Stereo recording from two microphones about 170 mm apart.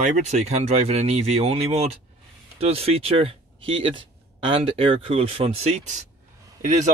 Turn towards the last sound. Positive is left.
turn(degrees=-45)  # may be behind; listen again after turning